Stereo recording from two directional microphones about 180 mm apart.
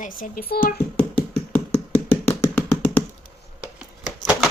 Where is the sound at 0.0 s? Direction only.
50° left (ahead or behind).